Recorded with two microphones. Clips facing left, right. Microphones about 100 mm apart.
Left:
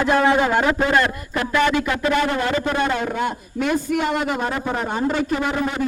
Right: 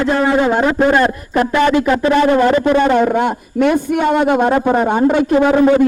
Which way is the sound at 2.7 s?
50° right (ahead or behind).